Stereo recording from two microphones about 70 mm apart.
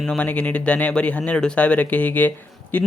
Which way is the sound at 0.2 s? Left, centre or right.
Left.